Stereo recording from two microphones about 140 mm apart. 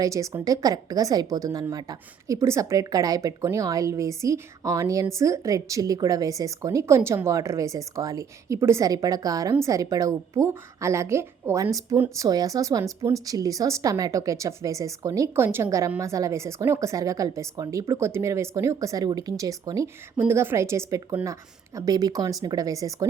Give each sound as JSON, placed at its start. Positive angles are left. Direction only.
{"t": 0.0, "sound": "a woman's voice", "side_deg": -20}